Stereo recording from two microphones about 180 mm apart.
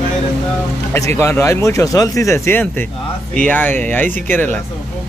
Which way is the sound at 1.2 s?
15° left (ahead or behind).